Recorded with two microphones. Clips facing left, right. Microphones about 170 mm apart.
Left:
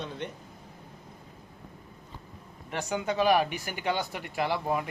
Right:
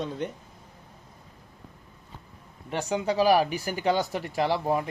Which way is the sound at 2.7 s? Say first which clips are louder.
Right 3 dB; 35° right (ahead or behind).